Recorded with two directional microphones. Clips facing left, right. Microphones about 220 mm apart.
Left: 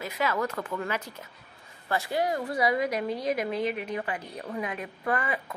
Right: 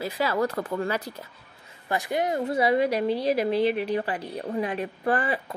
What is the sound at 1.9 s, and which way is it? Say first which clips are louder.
Speech: right 2 dB; 15° right (ahead or behind).